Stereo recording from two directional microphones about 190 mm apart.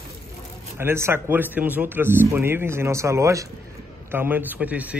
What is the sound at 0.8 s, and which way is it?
Speech, 10° right (ahead or behind).